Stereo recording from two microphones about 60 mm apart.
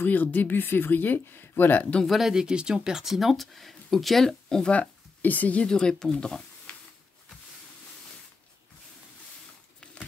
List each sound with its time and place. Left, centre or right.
0.0 s speech: left
2.0 s speech: centre
4.7 s speech: left; by 6.4 s centre